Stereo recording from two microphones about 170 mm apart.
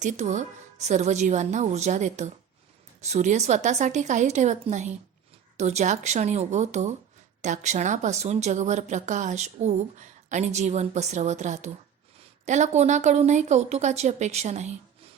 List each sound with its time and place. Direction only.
0.0 s a woman's voice: 45° right (ahead or behind)